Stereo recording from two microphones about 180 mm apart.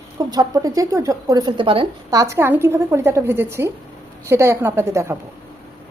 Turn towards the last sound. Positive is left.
turn(degrees=-15)  # may be behind; listen again after turning